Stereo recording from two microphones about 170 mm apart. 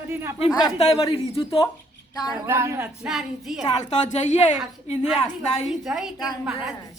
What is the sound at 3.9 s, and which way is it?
Speech, 45° left (ahead or behind).